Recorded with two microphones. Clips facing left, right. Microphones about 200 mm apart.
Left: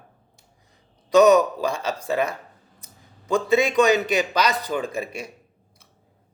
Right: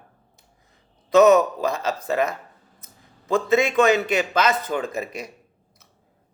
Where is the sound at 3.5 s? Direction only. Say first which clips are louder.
Even; 35° left (ahead or behind).